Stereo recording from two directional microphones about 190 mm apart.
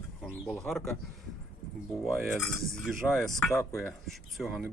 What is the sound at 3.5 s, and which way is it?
Speech, 15° left (ahead or behind).